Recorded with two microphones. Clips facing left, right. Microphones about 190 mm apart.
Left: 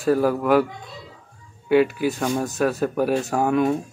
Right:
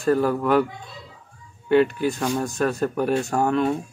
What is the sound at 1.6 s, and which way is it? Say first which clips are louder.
A man's voice: even; 5° left (ahead or behind).